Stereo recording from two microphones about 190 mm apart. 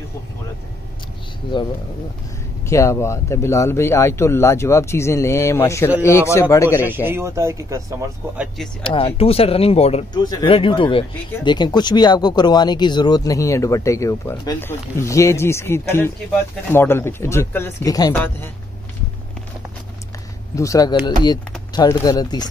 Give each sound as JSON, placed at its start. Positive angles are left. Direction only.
{"t": 2.6, "sound": "speech", "side_deg": 15}
{"t": 6.8, "sound": "speech", "side_deg": -10}
{"t": 8.8, "sound": "speech", "side_deg": 30}
{"t": 20.5, "sound": "speech", "side_deg": 15}